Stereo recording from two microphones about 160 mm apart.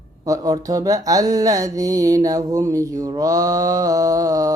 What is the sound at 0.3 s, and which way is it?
Mantra, 20° right (ahead or behind).